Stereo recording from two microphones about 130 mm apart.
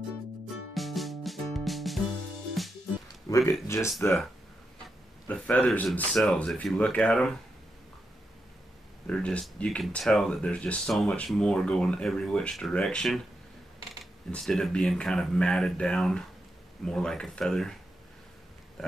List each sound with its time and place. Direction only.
0.7 s music: centre (ahead or behind)
3.3 s speech: 25° left (ahead or behind)
5.3 s a man's voice: 10° left (ahead or behind)
9.0 s speech: 10° left (ahead or behind)
14.3 s speech: centre (ahead or behind)
18.8 s speech: centre (ahead or behind)